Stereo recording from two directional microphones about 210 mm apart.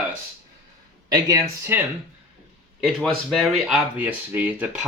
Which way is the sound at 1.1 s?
15° right (ahead or behind).